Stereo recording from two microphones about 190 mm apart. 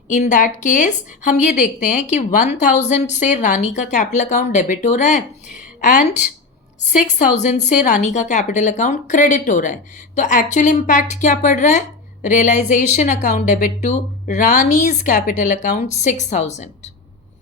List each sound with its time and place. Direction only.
0.1 s a woman's voice: 40° left (ahead or behind)
7.3 s a woman's voice: 35° left (ahead or behind)